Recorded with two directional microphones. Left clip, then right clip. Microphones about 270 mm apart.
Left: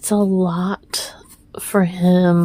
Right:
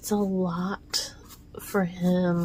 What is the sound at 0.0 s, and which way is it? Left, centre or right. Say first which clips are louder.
A woman's voice: left 9 dB; left.